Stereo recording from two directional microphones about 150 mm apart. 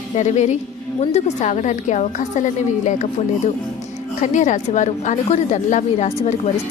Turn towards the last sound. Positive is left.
turn(degrees=50)  # may be behind; listen again after turning